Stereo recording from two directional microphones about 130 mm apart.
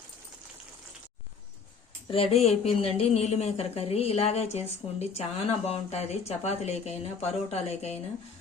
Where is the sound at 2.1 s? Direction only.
50° left (ahead or behind).